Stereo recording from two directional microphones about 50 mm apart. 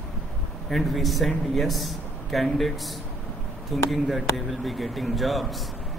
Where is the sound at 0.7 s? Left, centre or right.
Centre.